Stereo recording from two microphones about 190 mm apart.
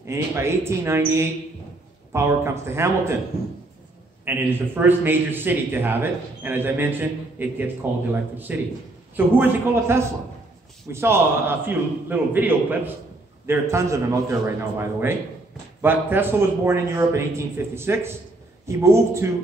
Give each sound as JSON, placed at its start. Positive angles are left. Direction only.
{"t": 0.0, "sound": "a man's voice", "side_deg": -15}
{"t": 4.2, "sound": "a man's voice", "side_deg": -10}